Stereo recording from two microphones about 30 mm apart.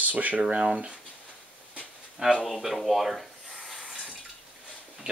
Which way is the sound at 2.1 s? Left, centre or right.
Right.